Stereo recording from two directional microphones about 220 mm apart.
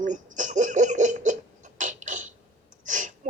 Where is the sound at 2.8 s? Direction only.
35° right (ahead or behind).